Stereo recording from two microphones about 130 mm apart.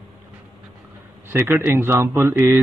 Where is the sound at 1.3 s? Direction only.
20° right (ahead or behind).